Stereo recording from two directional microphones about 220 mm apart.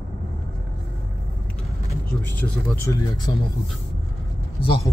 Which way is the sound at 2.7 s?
15° left (ahead or behind).